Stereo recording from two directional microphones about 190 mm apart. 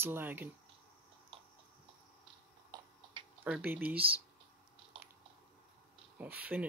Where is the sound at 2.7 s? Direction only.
20° right (ahead or behind).